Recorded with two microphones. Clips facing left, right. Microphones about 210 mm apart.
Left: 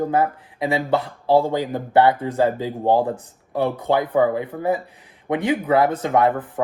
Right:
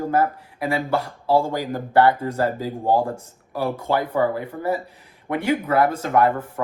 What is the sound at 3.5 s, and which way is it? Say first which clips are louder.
Speech: left 3 dB; 20° left (ahead or behind).